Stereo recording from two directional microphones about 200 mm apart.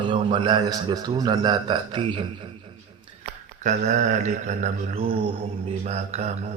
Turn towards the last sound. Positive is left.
turn(degrees=-35)  # may be behind; listen again after turning